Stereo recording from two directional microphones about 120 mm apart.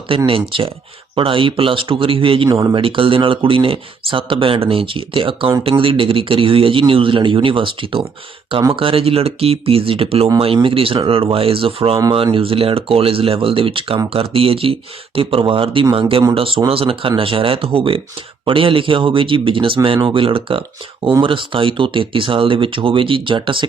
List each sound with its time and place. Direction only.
0.3 s speech: 50° right (ahead or behind)